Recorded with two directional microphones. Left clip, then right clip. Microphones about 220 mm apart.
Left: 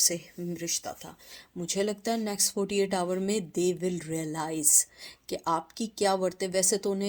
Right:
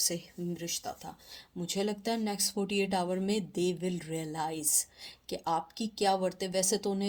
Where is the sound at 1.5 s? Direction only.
30° left (ahead or behind).